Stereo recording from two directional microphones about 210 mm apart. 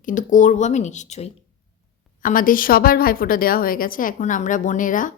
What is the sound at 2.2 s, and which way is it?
A woman's voice, 40° left (ahead or behind).